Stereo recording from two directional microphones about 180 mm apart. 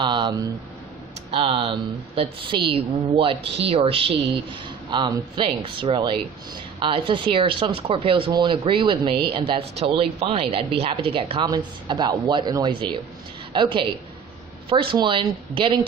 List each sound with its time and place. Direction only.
0.0 s speech: 25° right (ahead or behind)